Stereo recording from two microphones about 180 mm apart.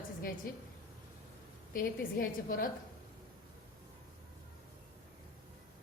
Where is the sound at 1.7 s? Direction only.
55° left (ahead or behind).